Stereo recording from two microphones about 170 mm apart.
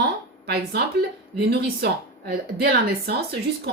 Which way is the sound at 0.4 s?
70° right (ahead or behind).